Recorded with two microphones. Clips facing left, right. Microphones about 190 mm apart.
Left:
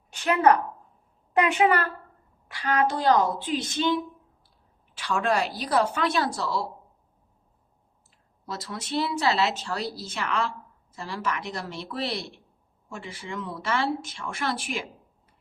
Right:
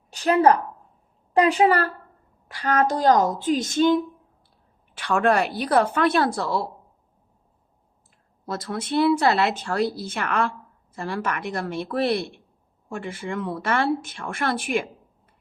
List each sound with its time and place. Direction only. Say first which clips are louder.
0.1 s a woman's voice: right 3 dB; 35° right (ahead or behind)
2.5 s a woman's voice: right 3 dB; 45° right (ahead or behind)
4.9 s a woman's voice: right 5 dB; 60° right (ahead or behind)
8.4 s a woman's voice: right 6 dB; 50° right (ahead or behind)